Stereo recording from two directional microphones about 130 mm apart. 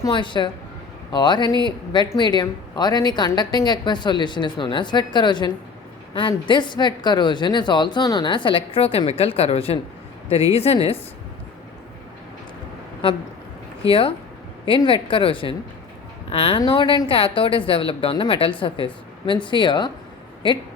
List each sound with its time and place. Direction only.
0.0 s a woman's voice: 35° left (ahead or behind)
14.8 s a woman's voice: 40° left (ahead or behind)